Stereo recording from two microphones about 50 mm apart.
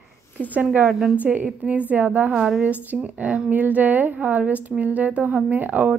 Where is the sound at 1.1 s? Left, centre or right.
Right.